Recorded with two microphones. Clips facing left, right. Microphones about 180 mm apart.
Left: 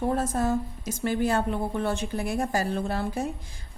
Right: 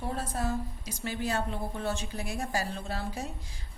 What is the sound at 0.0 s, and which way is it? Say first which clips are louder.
A woman's voice: left 8 dB; 50° left (ahead or behind).